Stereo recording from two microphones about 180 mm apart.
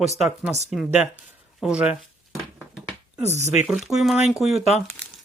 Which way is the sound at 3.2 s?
40° right (ahead or behind).